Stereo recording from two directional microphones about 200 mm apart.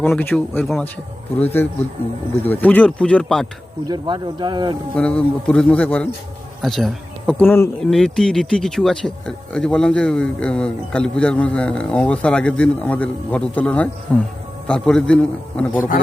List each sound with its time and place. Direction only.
0.0 s a man's voice: 10° left (ahead or behind)
3.8 s speech: 20° right (ahead or behind)
4.9 s a man's voice: 5° left (ahead or behind)